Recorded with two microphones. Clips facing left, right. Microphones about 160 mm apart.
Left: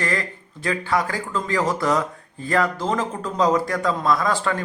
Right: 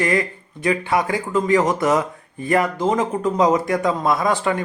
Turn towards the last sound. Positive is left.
turn(degrees=-20)  # may be behind; listen again after turning